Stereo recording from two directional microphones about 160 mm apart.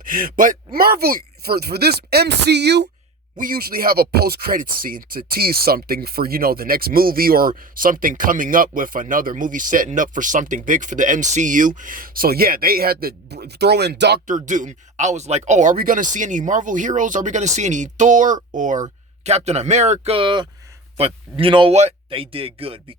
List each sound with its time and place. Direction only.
0.0 s speech: 60° right (ahead or behind); by 2.9 s 90° right
3.3 s speech: 60° right (ahead or behind); by 14.2 s 90° right
14.3 s speech: 55° right (ahead or behind); by 22.8 s 35° right (ahead or behind)